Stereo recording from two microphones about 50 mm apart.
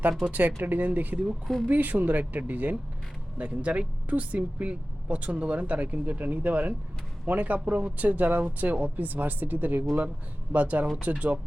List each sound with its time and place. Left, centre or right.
0.3 s speech: right